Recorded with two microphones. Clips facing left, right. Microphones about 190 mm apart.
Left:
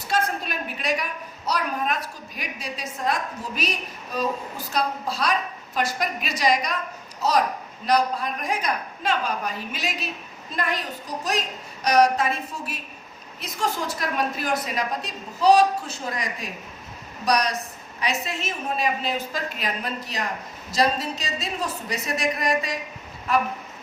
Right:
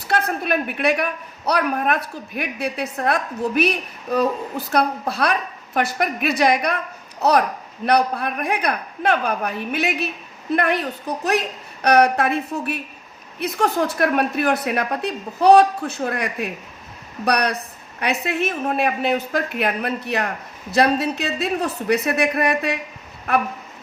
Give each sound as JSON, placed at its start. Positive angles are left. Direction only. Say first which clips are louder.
{"t": 0.1, "sound": "a man's voice", "louder": "right 5 dB", "side_deg": -60}